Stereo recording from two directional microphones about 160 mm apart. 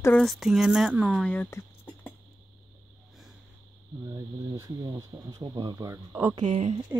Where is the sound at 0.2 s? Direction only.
Centre (ahead or behind).